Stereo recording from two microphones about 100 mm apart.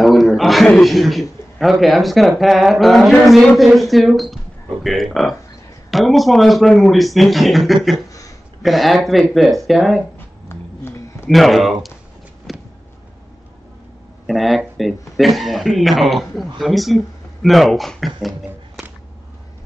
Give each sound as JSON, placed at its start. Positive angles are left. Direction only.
{"t": 0.0, "sound": "a sound", "side_deg": 0}
{"t": 1.6, "sound": "speech", "side_deg": 0}
{"t": 10.1, "sound": "a sound", "side_deg": 25}
{"t": 11.2, "sound": "speech", "side_deg": 0}
{"t": 12.5, "sound": "vehicle", "side_deg": 0}
{"t": 14.2, "sound": "speech", "side_deg": 0}